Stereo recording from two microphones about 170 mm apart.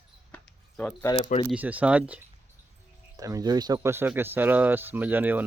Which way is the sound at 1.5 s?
10° right (ahead or behind).